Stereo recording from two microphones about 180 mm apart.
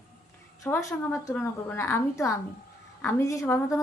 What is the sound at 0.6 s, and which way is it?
A woman's voice, 15° left (ahead or behind).